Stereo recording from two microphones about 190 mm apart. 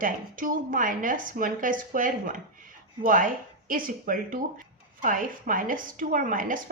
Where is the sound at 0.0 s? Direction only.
45° right (ahead or behind).